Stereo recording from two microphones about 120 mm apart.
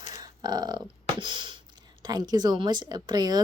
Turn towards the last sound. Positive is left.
turn(degrees=-35)  # may be behind; listen again after turning